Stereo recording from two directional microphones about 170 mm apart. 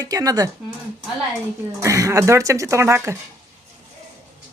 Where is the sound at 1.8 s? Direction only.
20° right (ahead or behind).